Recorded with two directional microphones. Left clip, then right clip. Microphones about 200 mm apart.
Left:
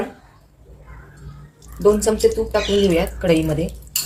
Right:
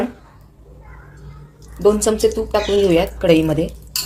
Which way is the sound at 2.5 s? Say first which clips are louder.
Right 2 dB; 40° right (ahead or behind).